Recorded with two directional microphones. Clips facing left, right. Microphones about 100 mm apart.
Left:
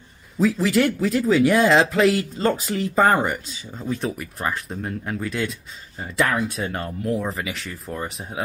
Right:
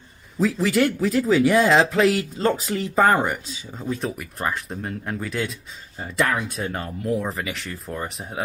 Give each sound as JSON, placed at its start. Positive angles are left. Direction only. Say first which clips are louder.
{"t": 0.4, "sound": "speech", "louder": "left 1 dB", "side_deg": 0}